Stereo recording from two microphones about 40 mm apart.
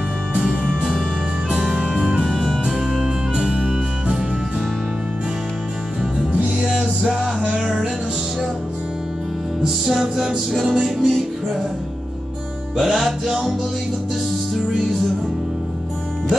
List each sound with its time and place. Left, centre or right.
1.5 s music: right
2.3 s music: centre
2.6 s music: centre
6.3 s music: right
6.8 s music: centre
9.7 s music: centre
12.7 s music: centre